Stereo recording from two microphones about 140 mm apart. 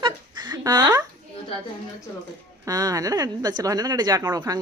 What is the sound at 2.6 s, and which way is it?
Speech, 25° right (ahead or behind).